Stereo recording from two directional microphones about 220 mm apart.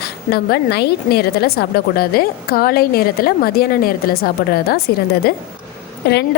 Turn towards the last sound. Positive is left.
turn(degrees=50)  # may be behind; listen again after turning